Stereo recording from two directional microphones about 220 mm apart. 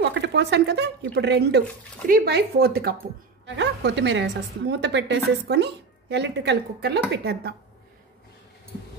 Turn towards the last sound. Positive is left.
turn(degrees=-50)  # may be behind; listen again after turning